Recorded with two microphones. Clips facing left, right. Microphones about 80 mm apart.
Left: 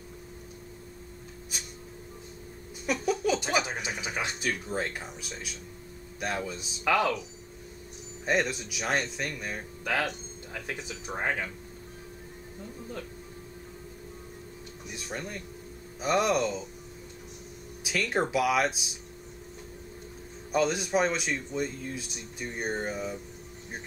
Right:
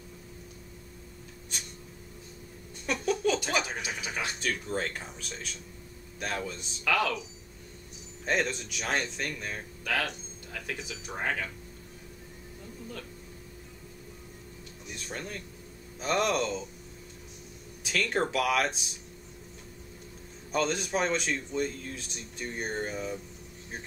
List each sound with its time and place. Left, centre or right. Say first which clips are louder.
1.5 s a sound: even; centre
2.9 s speech: left 1 dB; centre
3.6 s speech: left 2 dB; left
4.4 s speech: left 1 dB; centre
6.8 s speech: left 3 dB; left
8.3 s speech: left 2 dB; centre
10.5 s speech: left 1 dB; left
14.9 s a sound: left 1 dB; centre
16.0 s speech: left 2 dB; centre
17.8 s speech: left 1 dB; centre
20.5 s speech: left 3 dB; centre